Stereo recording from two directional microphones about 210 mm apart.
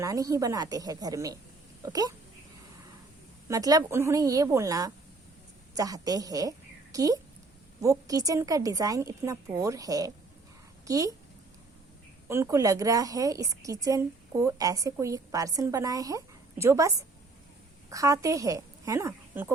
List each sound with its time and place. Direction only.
0.0 s a woman's voice: 15° right (ahead or behind)
3.5 s a woman's voice: 15° right (ahead or behind)
12.3 s a woman's voice: 15° right (ahead or behind)